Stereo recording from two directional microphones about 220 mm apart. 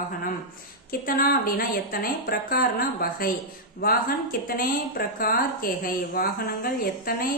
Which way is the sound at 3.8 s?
40° left (ahead or behind).